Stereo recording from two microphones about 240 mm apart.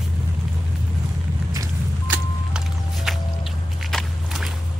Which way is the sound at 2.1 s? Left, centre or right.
Centre.